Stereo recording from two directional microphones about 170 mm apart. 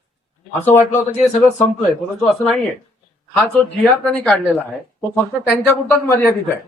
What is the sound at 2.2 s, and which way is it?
Speech, centre (ahead or behind).